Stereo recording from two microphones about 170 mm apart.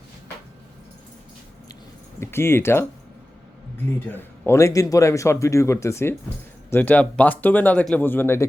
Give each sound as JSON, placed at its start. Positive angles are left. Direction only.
{"t": 2.1, "sound": "speech", "side_deg": 15}
{"t": 4.0, "sound": "speech", "side_deg": 10}